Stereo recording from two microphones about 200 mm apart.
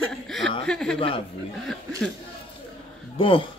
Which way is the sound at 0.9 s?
25° left (ahead or behind).